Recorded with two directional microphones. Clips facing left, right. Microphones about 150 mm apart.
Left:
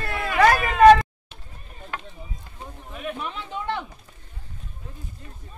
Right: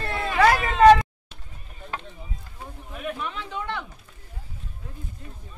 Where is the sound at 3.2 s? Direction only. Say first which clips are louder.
Even; 20° left (ahead or behind).